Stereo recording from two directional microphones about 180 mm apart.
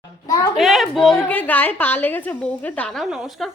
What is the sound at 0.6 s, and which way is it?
A woman's voice, centre (ahead or behind).